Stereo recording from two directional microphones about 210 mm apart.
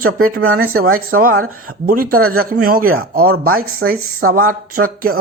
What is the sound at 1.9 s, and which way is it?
Speech, 45° right (ahead or behind).